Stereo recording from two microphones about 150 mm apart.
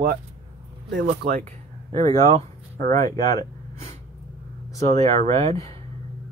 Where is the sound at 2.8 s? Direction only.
65° right (ahead or behind).